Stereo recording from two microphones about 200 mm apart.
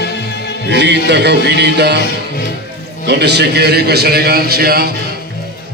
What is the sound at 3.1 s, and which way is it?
A man's voice, 55° right (ahead or behind).